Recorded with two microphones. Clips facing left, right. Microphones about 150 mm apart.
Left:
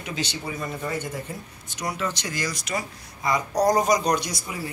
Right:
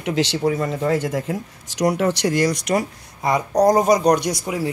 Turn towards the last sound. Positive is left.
turn(degrees=-65)  # may be behind; listen again after turning